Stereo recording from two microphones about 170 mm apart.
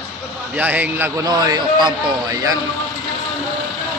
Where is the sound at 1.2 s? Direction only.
25° right (ahead or behind).